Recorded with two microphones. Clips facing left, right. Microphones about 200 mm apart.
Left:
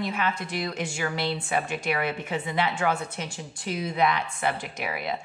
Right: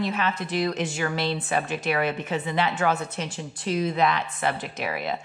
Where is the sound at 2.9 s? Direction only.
20° right (ahead or behind).